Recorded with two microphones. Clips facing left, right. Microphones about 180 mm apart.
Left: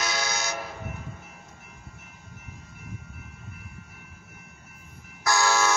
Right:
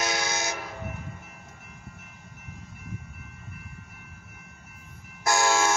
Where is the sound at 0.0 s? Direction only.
50° right (ahead or behind).